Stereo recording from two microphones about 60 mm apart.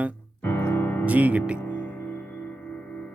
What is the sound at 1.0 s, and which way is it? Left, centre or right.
Speech, right.